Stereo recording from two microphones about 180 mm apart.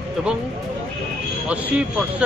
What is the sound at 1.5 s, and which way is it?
Speech, 5° right (ahead or behind).